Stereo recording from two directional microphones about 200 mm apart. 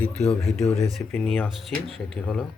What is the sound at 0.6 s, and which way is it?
Speech, 30° left (ahead or behind).